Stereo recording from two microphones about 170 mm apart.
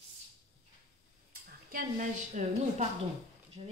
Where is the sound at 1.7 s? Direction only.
50° right (ahead or behind).